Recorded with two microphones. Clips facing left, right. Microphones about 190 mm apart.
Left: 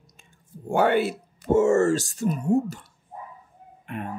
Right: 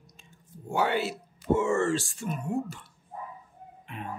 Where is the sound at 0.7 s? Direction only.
55° left (ahead or behind).